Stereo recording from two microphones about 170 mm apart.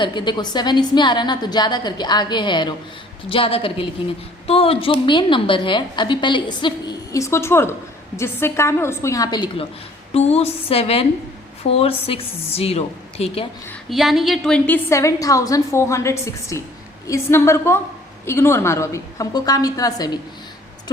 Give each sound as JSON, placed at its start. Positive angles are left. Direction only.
{"t": 0.0, "sound": "a woman's voice", "side_deg": 25}
{"t": 10.2, "sound": "a woman's voice", "side_deg": 40}
{"t": 13.9, "sound": "a woman's voice", "side_deg": 0}
{"t": 14.8, "sound": "a woman's voice", "side_deg": 20}